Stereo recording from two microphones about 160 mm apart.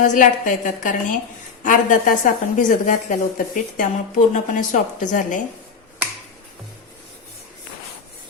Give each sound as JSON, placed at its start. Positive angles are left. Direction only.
{"t": 0.0, "sound": "a woman's voice", "side_deg": 55}